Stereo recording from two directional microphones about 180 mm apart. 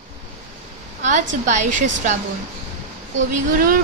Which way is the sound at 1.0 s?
40° right (ahead or behind).